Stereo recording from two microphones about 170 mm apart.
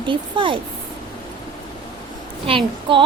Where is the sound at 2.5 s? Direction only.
30° right (ahead or behind).